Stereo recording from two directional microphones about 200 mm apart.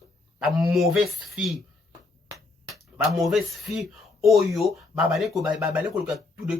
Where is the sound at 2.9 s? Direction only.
Centre (ahead or behind).